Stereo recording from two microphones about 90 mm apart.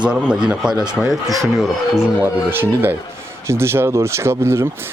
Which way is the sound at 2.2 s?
25° right (ahead or behind).